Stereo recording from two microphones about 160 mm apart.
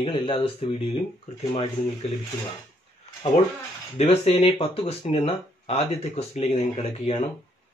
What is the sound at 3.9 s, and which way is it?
Speech, 40° left (ahead or behind).